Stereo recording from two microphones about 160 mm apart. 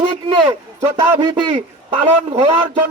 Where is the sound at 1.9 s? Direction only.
35° right (ahead or behind).